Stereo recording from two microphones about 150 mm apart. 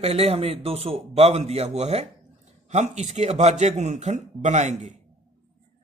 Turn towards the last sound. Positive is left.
turn(degrees=-50)  # may be behind; listen again after turning